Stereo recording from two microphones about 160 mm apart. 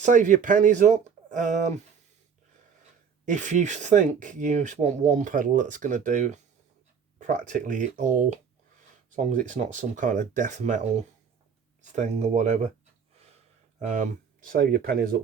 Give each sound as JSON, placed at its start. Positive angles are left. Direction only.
{"t": 0.0, "sound": "speech", "side_deg": -50}
{"t": 3.2, "sound": "speech", "side_deg": -50}
{"t": 11.8, "sound": "speech", "side_deg": -45}
{"t": 13.8, "sound": "speech", "side_deg": -50}